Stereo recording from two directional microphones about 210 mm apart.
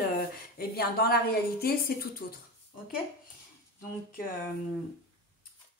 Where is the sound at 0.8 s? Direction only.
45° left (ahead or behind).